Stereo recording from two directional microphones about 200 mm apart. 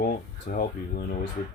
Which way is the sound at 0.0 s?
45° left (ahead or behind).